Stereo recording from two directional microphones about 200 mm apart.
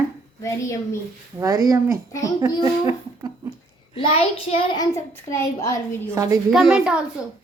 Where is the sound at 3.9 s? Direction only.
30° left (ahead or behind); by 6.2 s 10° left (ahead or behind).